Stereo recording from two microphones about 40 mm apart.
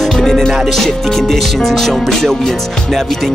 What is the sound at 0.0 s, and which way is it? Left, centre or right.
Music, centre.